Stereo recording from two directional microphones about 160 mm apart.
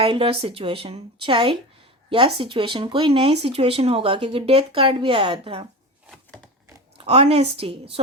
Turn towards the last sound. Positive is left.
turn(degrees=-35)  # may be behind; listen again after turning